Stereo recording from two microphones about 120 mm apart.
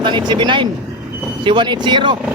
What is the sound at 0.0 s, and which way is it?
Speech, 40° right (ahead or behind).